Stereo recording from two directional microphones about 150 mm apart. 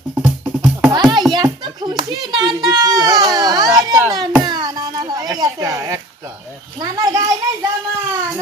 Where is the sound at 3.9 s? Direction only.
25° right (ahead or behind).